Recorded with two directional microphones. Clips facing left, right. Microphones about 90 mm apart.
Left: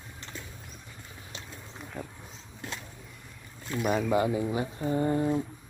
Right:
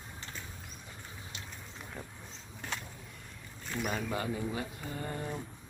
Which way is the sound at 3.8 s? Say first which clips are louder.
Left 10 dB; 20° left (ahead or behind).